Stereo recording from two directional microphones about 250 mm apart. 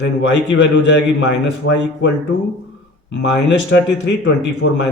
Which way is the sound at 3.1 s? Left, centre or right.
Left.